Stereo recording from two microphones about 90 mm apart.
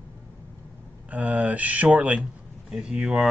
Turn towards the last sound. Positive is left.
turn(degrees=-5)  # may be behind; listen again after turning